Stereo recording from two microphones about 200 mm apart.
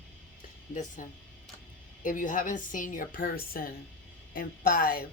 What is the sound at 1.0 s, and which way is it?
A woman's voice, 40° left (ahead or behind).